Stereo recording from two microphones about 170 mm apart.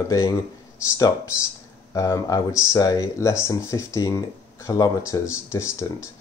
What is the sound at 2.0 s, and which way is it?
Speech, 20° left (ahead or behind).